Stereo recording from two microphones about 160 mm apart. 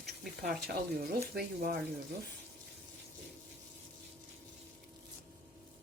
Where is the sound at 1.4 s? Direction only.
70° right (ahead or behind).